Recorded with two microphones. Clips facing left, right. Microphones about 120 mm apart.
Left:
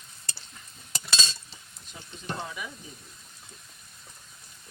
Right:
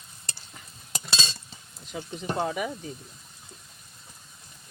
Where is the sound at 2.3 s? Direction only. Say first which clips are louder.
Right 13 dB; 55° right (ahead or behind).